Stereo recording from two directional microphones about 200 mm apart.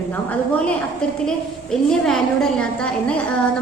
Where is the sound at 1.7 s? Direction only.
Centre (ahead or behind).